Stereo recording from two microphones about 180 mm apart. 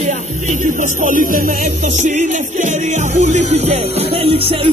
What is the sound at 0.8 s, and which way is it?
Speech, 45° right (ahead or behind).